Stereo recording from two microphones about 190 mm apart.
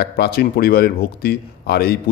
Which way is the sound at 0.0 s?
55° left (ahead or behind).